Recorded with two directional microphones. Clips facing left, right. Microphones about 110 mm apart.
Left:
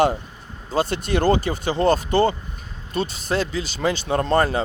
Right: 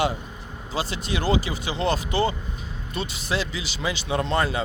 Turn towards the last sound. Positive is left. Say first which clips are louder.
# left 4 dB
turn(degrees=45)  # may be behind; listen again after turning